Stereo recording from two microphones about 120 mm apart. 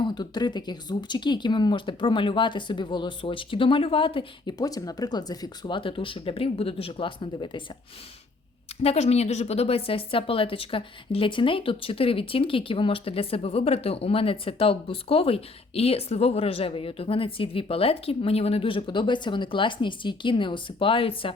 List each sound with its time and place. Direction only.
0.0 s speech: 35° left (ahead or behind)
4.5 s a woman's voice: 30° left (ahead or behind)
8.8 s a woman's voice: 60° left (ahead or behind)